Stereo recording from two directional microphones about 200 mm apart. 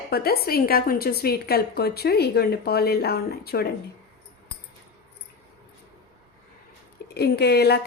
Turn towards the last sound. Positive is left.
turn(degrees=55)  # may be behind; listen again after turning